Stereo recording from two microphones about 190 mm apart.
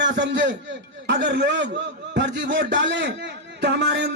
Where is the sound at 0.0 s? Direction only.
70° right (ahead or behind).